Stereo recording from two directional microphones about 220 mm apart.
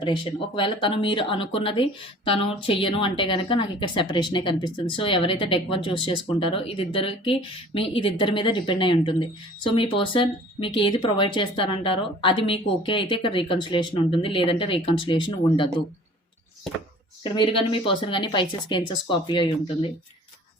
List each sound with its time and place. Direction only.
0.0 s speech: 20° left (ahead or behind)
17.3 s speech: 20° left (ahead or behind)